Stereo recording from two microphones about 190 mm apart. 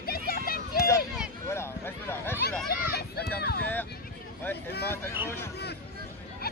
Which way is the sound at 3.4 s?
55° left (ahead or behind).